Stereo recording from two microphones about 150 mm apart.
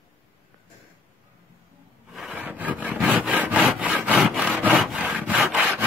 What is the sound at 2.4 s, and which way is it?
Wood, 10° right (ahead or behind).